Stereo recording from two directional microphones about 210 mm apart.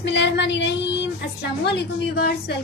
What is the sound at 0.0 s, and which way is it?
Speech, 55° left (ahead or behind).